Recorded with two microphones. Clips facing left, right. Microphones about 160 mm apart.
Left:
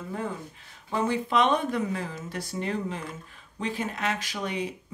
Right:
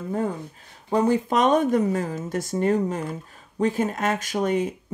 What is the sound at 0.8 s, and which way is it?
Speech, 40° right (ahead or behind).